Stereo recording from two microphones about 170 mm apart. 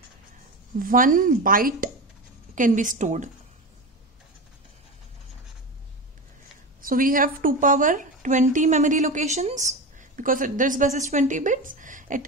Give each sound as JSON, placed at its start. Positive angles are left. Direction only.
{"t": 0.7, "sound": "speech", "side_deg": -55}
{"t": 6.8, "sound": "speech", "side_deg": -55}